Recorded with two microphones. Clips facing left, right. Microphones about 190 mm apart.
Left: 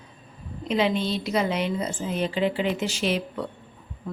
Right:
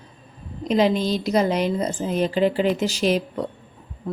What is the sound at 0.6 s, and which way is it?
A woman's voice, 40° right (ahead or behind).